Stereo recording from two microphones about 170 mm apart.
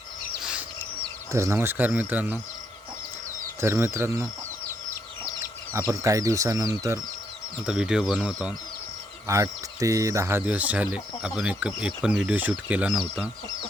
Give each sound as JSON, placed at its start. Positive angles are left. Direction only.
{"t": 1.3, "sound": "speech", "side_deg": -15}
{"t": 3.6, "sound": "speech", "side_deg": -15}
{"t": 5.7, "sound": "speech", "side_deg": -15}
{"t": 7.6, "sound": "speech", "side_deg": -5}
{"t": 9.2, "sound": "speech", "side_deg": -20}